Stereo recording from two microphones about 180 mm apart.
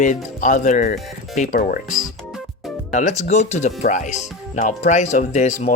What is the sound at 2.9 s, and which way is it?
Speech, 40° left (ahead or behind).